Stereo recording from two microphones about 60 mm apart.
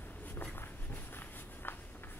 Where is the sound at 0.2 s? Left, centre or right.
Left.